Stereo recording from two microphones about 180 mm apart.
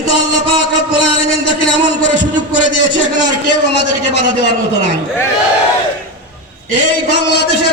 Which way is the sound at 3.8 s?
70° left (ahead or behind).